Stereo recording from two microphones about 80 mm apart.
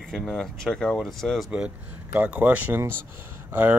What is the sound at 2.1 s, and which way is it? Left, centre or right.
Speech, centre.